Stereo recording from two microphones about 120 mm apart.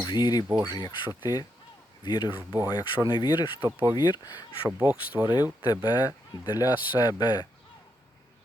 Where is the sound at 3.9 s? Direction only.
40° left (ahead or behind).